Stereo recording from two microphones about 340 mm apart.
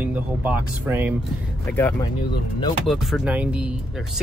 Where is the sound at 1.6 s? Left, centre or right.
Centre.